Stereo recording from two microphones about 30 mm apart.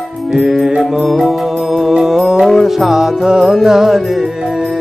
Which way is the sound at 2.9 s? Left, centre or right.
Centre.